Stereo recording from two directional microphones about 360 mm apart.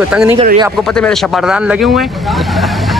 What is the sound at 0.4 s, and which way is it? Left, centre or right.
Speech, centre.